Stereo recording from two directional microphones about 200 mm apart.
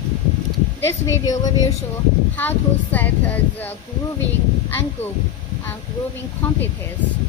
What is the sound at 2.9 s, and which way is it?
A woman's voice, 10° left (ahead or behind).